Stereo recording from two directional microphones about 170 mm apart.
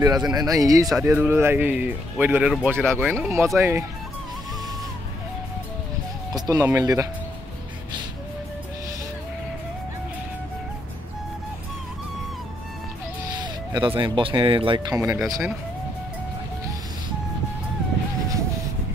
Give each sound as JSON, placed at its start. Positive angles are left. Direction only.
{"t": 0.0, "sound": "speech", "side_deg": -20}
{"t": 3.2, "sound": "speech", "side_deg": -15}
{"t": 6.3, "sound": "speech", "side_deg": -20}
{"t": 13.4, "sound": "speech", "side_deg": -25}
{"t": 15.0, "sound": "speech", "side_deg": -15}